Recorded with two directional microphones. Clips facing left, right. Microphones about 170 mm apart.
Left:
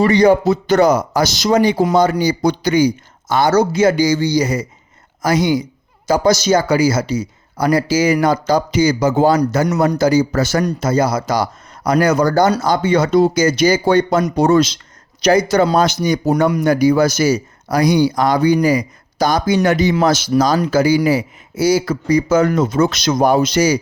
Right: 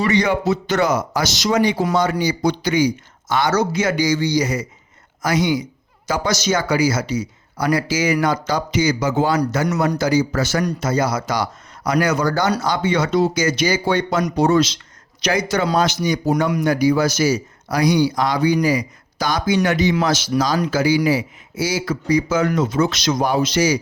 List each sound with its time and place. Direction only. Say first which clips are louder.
0.0 s speech: left 6 dB; 35° left (ahead or behind)